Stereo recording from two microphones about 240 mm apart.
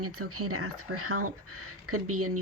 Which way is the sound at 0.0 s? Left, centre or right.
Right.